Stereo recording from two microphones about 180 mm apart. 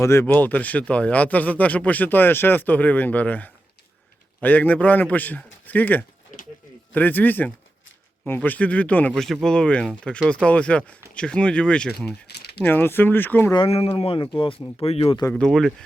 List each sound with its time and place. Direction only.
0.0 s speech: 15° left (ahead or behind)
6.3 s a sound: 45° left (ahead or behind)
6.9 s speech: 10° left (ahead or behind)
12.3 s a sound: 65° left (ahead or behind)
12.6 s speech: 10° left (ahead or behind)
13.5 s speech: 30° left (ahead or behind)
15.3 s speech: 5° left (ahead or behind)